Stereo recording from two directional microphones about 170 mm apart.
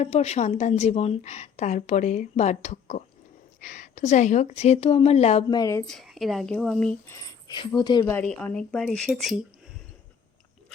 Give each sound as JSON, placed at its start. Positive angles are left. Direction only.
{"t": 0.0, "sound": "a woman's voice", "side_deg": 40}
{"t": 5.5, "sound": "speech", "side_deg": 20}
{"t": 5.8, "sound": "speech", "side_deg": 0}
{"t": 7.1, "sound": "speech", "side_deg": 20}
{"t": 8.1, "sound": "speech", "side_deg": 5}